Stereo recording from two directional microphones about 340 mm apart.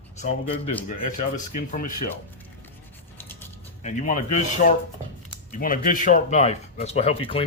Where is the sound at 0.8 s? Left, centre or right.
Left.